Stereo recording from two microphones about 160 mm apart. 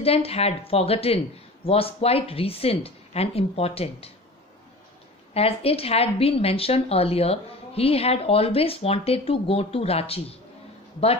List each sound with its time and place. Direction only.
0.0 s a woman's voice: 40° left (ahead or behind)
5.3 s a woman's voice: 40° left (ahead or behind)